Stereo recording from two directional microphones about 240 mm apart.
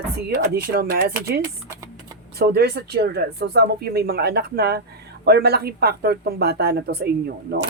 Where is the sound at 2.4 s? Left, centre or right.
Right.